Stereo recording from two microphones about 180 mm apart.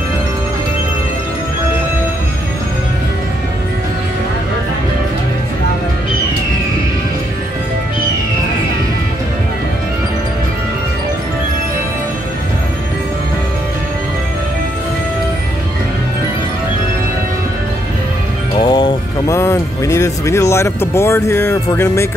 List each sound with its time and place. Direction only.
18.7 s music: 25° left (ahead or behind)